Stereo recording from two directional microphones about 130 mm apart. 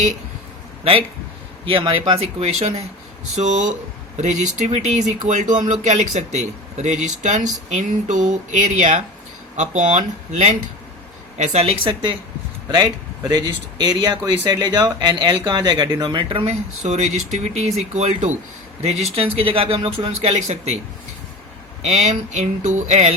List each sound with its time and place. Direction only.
1.6 s speech: 40° right (ahead or behind)
3.3 s speech: 65° right (ahead or behind)
11.3 s speech: 55° right (ahead or behind)
12.6 s speech: 30° right (ahead or behind)
16.5 s speech: 55° right (ahead or behind)
21.8 s speech: 60° right (ahead or behind)